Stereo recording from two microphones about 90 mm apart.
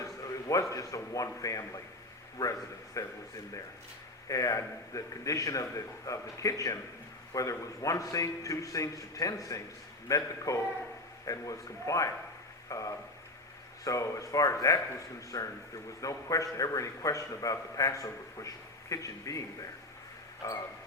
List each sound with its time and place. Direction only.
0.0 s a man's voice: 40° left (ahead or behind)
4.3 s a man's voice: 40° left (ahead or behind)